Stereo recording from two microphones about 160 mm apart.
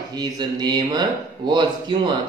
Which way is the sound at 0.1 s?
25° right (ahead or behind).